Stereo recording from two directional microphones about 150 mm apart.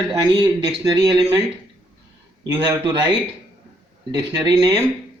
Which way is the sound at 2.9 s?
30° right (ahead or behind).